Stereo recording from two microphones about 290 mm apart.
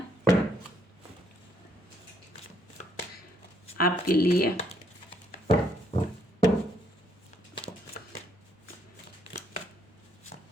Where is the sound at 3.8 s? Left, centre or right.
Left.